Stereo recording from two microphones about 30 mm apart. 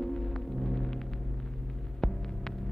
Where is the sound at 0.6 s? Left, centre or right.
Centre.